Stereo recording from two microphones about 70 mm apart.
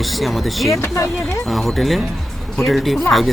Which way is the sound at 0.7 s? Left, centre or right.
Left.